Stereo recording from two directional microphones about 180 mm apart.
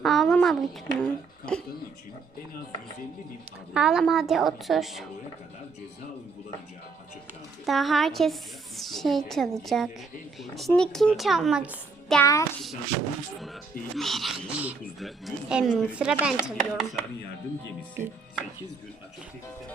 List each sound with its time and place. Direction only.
0.0 s a sound: centre (ahead or behind)
3.8 s speech: centre (ahead or behind)
7.6 s a woman's voice: centre (ahead or behind)
12.2 s a child's voice: 15° left (ahead or behind)
13.9 s speech: centre (ahead or behind)